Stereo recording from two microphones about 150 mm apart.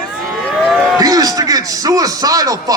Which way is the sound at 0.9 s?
25° right (ahead or behind).